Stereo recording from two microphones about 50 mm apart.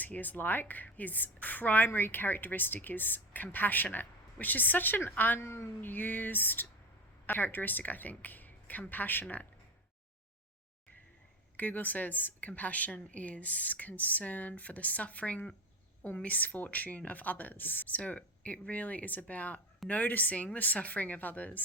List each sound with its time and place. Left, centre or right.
0.0 s a woman's voice: left
1.9 s a woman's voice: left
5.4 s a woman's voice: left
5.8 s a woman's voice: left
11.5 s a woman's voice: left